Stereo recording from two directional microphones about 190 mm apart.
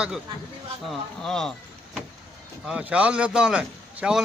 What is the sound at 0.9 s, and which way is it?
Speech, centre (ahead or behind).